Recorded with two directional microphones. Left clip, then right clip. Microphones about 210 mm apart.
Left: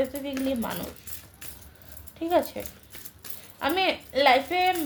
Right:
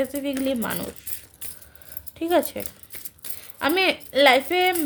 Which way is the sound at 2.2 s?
45° right (ahead or behind).